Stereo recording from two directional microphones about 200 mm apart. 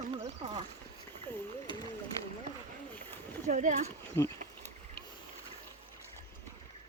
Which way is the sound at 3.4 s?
35° right (ahead or behind).